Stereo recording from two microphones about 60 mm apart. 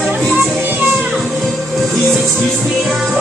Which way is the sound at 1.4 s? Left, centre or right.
Centre.